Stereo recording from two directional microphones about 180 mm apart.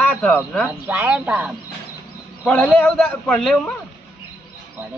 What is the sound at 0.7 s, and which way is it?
Speech, 10° right (ahead or behind).